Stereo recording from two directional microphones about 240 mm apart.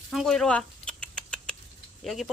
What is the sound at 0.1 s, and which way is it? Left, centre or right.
Rodents, centre.